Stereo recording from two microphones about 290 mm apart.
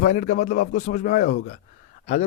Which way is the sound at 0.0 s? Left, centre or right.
Left.